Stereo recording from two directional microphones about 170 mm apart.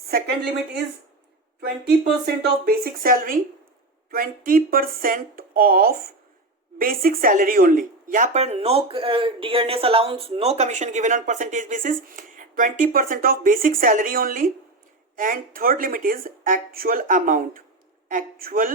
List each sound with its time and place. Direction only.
1.6 s speech: 70° right (ahead or behind)